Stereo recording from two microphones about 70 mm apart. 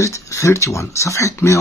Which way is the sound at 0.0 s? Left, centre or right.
Left.